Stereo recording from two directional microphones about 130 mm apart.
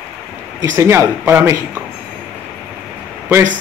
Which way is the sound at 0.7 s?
20° right (ahead or behind).